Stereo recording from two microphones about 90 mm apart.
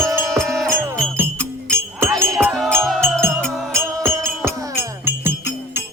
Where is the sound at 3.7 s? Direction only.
30° right (ahead or behind).